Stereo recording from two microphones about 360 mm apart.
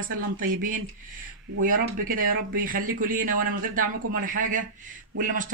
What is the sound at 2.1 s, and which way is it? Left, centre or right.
Speech, right.